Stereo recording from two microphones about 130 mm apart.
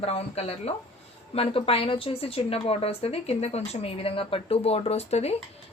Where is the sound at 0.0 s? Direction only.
50° left (ahead or behind).